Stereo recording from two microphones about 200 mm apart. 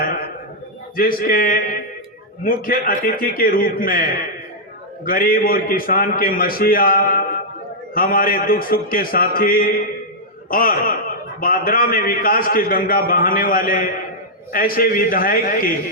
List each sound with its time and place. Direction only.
0.9 s a man's voice: 45° left (ahead or behind)